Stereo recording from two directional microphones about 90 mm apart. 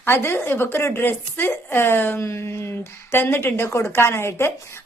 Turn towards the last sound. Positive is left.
turn(degrees=30)  # may be behind; listen again after turning